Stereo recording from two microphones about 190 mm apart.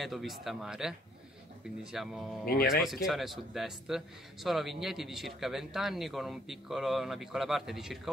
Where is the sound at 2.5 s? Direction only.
50° left (ahead or behind).